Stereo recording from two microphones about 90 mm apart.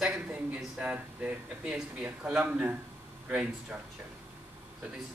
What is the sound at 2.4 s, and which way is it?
Speech, 20° right (ahead or behind).